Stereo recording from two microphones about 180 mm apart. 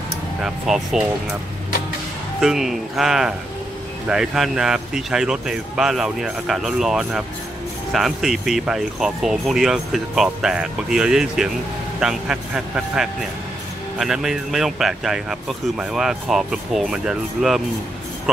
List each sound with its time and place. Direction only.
0.4 s speech: 5° right (ahead or behind)
2.4 s speech: centre (ahead or behind)